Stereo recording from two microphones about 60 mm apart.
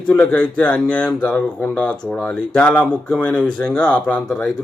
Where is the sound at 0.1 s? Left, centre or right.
Left.